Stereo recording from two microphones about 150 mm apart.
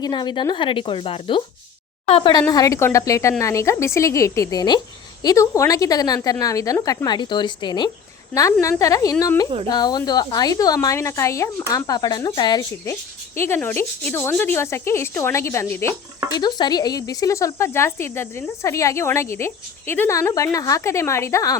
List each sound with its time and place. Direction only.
0.0 s speech: 30° left (ahead or behind)
2.5 s a woman's voice: 25° left (ahead or behind)
16.3 s speech: 30° left (ahead or behind)